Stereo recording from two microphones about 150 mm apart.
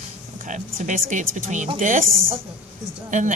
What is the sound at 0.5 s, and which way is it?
A woman's voice, 60° right (ahead or behind).